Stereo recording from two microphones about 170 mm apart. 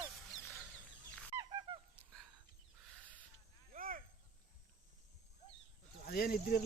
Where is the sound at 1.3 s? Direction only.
20° right (ahead or behind).